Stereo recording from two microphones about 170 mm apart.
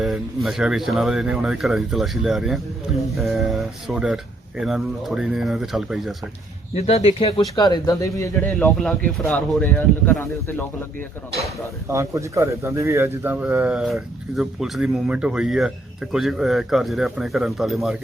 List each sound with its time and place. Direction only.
0.0 s speech: centre (ahead or behind)
6.7 s speech: 35° left (ahead or behind); by 10.2 s 10° left (ahead or behind)
11.9 s speech: 15° right (ahead or behind); by 17.9 s centre (ahead or behind)